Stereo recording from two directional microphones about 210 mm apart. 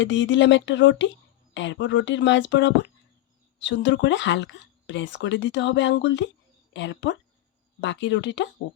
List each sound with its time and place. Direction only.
0.0 s speech: 60° left (ahead or behind)